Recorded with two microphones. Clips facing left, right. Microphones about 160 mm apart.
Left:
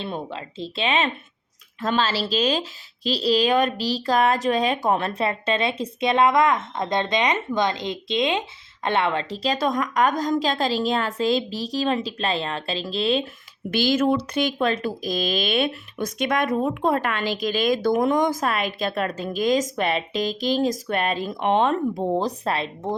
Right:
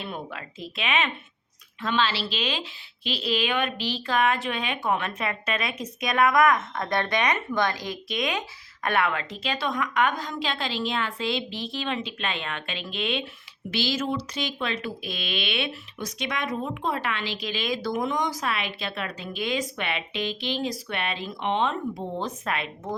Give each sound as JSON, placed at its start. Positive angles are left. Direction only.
{"t": 0.0, "sound": "speech", "side_deg": 25}
{"t": 13.7, "sound": "speech", "side_deg": 50}